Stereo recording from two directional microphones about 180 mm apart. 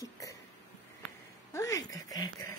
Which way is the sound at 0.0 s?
15° left (ahead or behind).